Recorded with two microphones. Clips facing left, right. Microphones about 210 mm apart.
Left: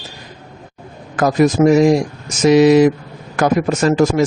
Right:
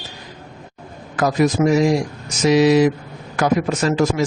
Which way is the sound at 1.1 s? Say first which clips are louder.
Left 4 dB; 50° left (ahead or behind).